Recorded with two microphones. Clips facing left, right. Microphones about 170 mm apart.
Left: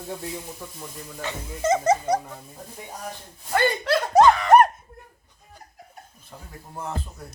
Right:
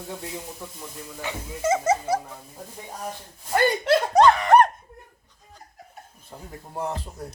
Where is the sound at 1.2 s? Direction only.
10° right (ahead or behind).